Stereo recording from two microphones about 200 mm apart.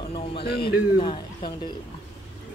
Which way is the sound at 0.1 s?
30° left (ahead or behind).